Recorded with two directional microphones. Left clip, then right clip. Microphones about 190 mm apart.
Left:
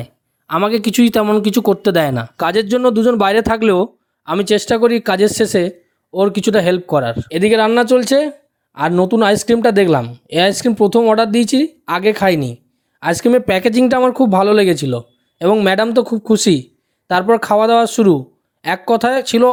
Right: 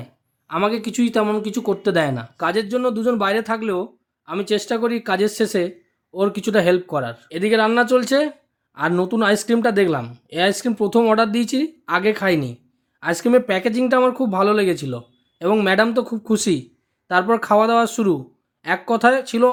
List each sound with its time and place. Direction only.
0.0 s speech: 40° left (ahead or behind)